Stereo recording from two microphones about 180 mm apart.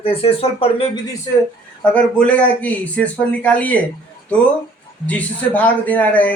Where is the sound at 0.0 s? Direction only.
30° left (ahead or behind).